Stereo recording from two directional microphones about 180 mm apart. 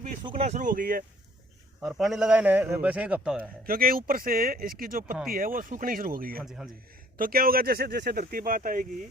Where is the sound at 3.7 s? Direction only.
50° right (ahead or behind).